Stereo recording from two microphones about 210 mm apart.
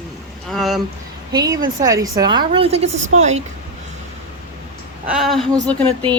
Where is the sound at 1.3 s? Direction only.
20° right (ahead or behind).